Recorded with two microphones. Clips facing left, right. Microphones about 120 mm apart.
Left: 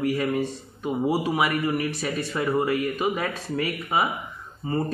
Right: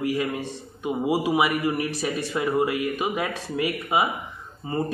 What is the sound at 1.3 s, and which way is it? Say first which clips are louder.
Speech: right 1 dB; 15° right (ahead or behind).